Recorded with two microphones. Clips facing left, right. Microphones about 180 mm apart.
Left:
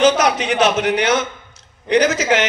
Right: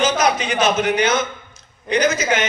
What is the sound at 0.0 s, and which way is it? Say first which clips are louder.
A man's voice: left 4 dB; 70° left (ahead or behind).